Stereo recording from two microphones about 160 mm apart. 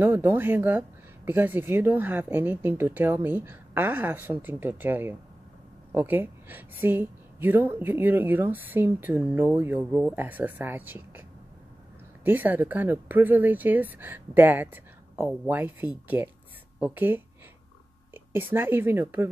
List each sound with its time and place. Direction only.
0.0 s speech: 15° right (ahead or behind)
12.3 s speech: 10° right (ahead or behind)